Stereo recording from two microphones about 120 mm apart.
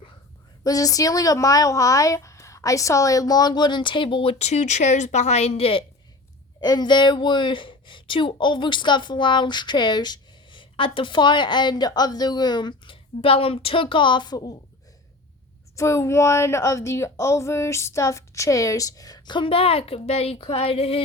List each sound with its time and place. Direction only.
0.6 s a woman's voice: 30° left (ahead or behind); by 5.8 s 55° left (ahead or behind)
6.6 s a woman's voice: 35° left (ahead or behind)
15.7 s speech: 25° left (ahead or behind); by 21.0 s 50° left (ahead or behind)